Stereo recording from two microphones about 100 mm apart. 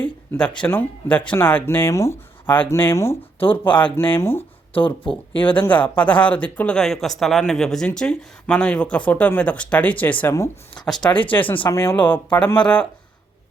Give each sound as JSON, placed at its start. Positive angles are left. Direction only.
{"t": 0.0, "sound": "speech", "side_deg": 10}
{"t": 5.0, "sound": "speech", "side_deg": 60}
{"t": 5.5, "sound": "speech", "side_deg": 15}
{"t": 10.3, "sound": "speech", "side_deg": 25}
{"t": 11.0, "sound": "speech", "side_deg": 55}
{"t": 11.3, "sound": "speech", "side_deg": 15}